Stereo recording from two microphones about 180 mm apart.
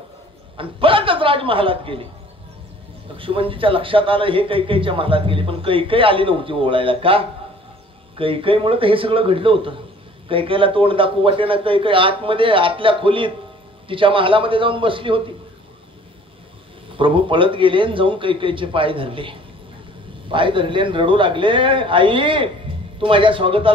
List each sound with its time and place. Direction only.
0.6 s a man's voice: 30° right (ahead or behind)
3.2 s a man's voice: 30° right (ahead or behind)
16.9 s a man's voice: 30° right (ahead or behind)